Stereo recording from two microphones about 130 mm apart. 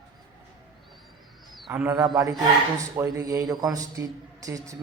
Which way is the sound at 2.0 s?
30° right (ahead or behind).